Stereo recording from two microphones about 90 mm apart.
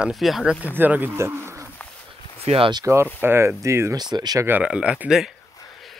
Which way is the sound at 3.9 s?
50° right (ahead or behind).